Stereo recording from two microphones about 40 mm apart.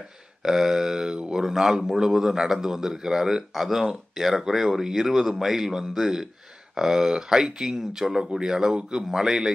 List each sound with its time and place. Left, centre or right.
0.4 s speech: centre